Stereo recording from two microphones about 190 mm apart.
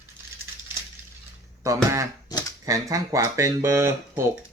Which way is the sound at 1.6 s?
15° right (ahead or behind).